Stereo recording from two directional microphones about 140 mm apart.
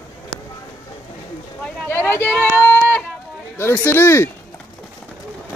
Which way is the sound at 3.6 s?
15° left (ahead or behind).